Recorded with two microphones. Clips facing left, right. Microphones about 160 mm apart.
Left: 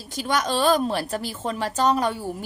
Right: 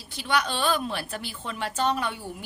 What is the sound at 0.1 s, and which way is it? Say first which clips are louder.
A woman's voice: left 3 dB; 40° left (ahead or behind).